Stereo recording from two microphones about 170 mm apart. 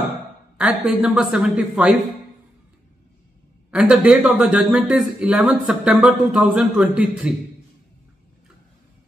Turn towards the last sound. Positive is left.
turn(degrees=-5)  # may be behind; listen again after turning